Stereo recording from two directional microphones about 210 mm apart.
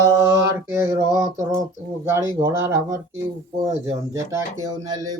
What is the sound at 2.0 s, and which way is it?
Speech, 15° right (ahead or behind).